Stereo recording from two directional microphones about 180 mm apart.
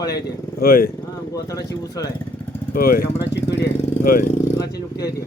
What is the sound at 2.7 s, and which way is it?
Speech, 55° left (ahead or behind).